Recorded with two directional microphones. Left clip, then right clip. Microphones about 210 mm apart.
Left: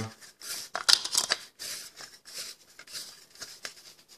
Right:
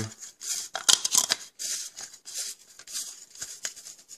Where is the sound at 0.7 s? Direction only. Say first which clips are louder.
Right 1 dB; 10° right (ahead or behind).